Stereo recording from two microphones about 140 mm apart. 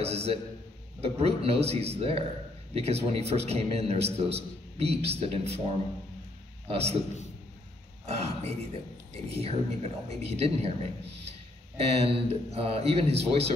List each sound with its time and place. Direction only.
0.0 s speech: 45° right (ahead or behind)
8.0 s speech: 50° right (ahead or behind)